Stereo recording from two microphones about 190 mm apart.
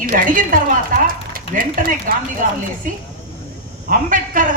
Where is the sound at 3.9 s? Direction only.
45° right (ahead or behind).